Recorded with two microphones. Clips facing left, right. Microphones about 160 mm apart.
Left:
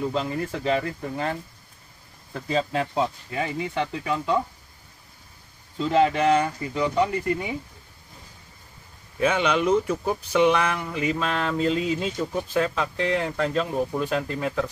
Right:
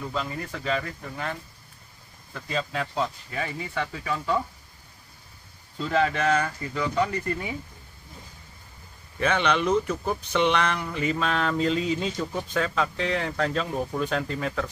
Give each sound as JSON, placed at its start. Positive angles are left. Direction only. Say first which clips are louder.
{"t": 0.0, "sound": "speech", "louder": "left 5 dB", "side_deg": 25}
{"t": 5.9, "sound": "speech", "louder": "left 4 dB", "side_deg": 20}
{"t": 9.2, "sound": "speech", "louder": "left 2 dB", "side_deg": 10}